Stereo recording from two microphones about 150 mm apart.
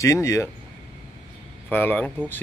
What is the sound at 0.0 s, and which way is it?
Speech, 20° left (ahead or behind).